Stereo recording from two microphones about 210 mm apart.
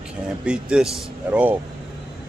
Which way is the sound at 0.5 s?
5° right (ahead or behind).